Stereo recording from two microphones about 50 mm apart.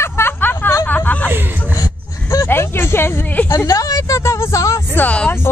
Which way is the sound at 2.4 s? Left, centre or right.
Left.